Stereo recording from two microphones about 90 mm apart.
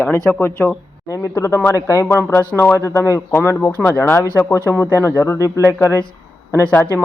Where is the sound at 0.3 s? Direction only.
25° left (ahead or behind).